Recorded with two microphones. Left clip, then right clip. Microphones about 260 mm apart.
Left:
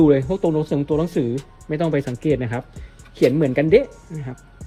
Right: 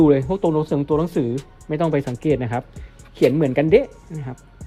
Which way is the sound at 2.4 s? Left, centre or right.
Right.